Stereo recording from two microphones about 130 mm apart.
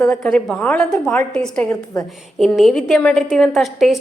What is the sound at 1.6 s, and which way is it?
Speech, 25° left (ahead or behind).